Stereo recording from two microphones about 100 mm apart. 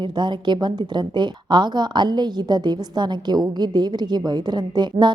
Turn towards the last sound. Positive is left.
turn(degrees=-45)  # may be behind; listen again after turning